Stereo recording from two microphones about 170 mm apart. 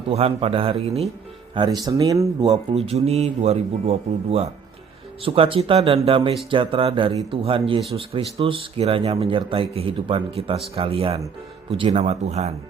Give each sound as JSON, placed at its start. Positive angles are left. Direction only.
{"t": 0.1, "sound": "speech", "side_deg": -35}
{"t": 1.5, "sound": "speech", "side_deg": -25}
{"t": 2.7, "sound": "speech", "side_deg": -40}